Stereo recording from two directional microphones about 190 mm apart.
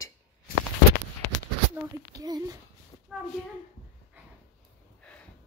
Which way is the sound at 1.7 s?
20° right (ahead or behind).